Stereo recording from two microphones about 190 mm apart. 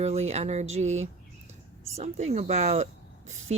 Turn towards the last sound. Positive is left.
turn(degrees=-40)  # may be behind; listen again after turning